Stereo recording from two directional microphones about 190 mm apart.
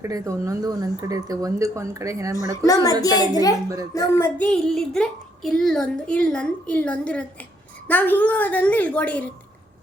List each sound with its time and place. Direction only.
0.0 s speech: 15° right (ahead or behind)
2.6 s a child's voice: 20° left (ahead or behind)
4.2 s a woman's voice: 5° left (ahead or behind)